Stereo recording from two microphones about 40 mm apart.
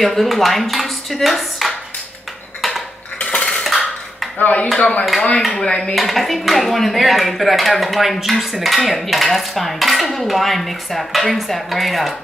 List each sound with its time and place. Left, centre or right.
0.0 s speech: centre
3.2 s cutlery: left
3.6 s dishes: centre
4.4 s speech: left
4.7 s speech: left
5.6 s dishes: centre
5.9 s speech: centre